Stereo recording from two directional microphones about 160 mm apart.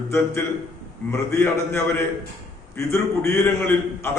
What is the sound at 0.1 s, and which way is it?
A man's voice, 15° left (ahead or behind).